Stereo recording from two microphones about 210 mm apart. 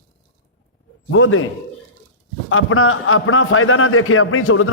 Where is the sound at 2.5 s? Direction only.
80° left.